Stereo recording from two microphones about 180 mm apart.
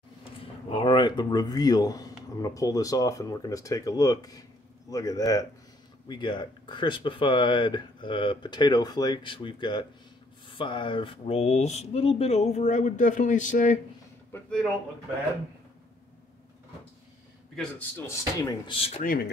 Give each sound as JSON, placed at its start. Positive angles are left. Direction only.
{"t": 0.2, "sound": "speech", "side_deg": 30}
{"t": 17.6, "sound": "speech", "side_deg": 10}
{"t": 18.7, "sound": "speech", "side_deg": 30}